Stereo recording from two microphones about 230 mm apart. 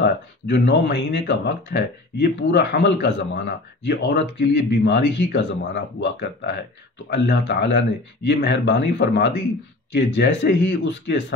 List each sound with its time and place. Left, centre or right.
0.0 s speech: left